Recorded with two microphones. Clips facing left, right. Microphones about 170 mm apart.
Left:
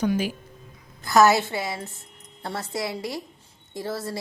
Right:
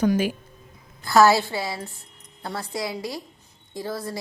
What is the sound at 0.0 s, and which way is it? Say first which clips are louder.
Speech: right 3 dB; 50° right (ahead or behind).